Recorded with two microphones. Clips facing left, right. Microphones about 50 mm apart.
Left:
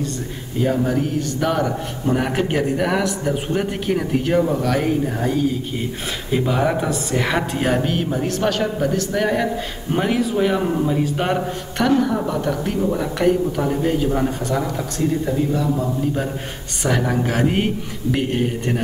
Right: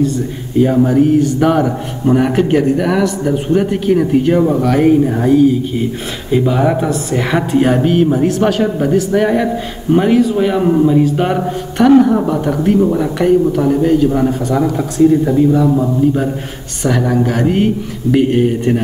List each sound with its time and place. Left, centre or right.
0.6 s a man's voice: centre
9.9 s a man's voice: centre
12.0 s a man's voice: right
16.8 s a man's voice: centre
18.1 s speech: centre